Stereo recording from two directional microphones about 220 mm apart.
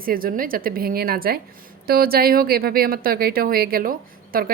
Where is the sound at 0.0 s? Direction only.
40° right (ahead or behind).